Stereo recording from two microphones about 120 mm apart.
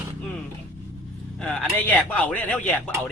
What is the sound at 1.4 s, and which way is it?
A man's voice, 10° left (ahead or behind).